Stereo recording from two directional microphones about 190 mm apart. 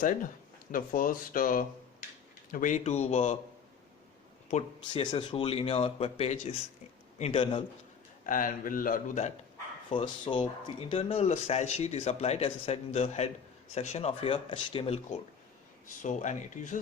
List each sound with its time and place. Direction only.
0.7 s a man's voice: 45° left (ahead or behind)
4.5 s speech: 30° left (ahead or behind)
8.3 s a man's voice: 45° left (ahead or behind)
9.9 s speech: 25° left (ahead or behind); by 16.8 s 40° left (ahead or behind)